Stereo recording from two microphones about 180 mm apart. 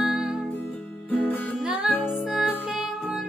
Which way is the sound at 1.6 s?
5° right (ahead or behind).